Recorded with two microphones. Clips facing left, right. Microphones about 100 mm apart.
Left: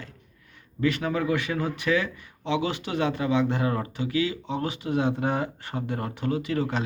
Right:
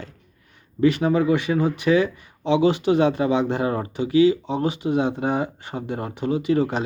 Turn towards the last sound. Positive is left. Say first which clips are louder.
# right 6 dB
turn(degrees=-20)  # may be behind; listen again after turning